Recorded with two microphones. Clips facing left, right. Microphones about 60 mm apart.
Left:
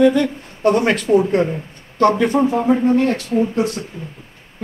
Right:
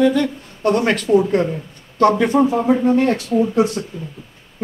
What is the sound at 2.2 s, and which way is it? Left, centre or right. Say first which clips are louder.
Speech: right 1 dB; centre.